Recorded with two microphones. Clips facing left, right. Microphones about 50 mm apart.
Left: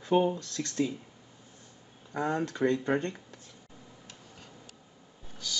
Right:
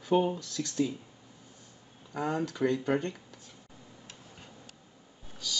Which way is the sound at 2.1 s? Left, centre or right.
Left.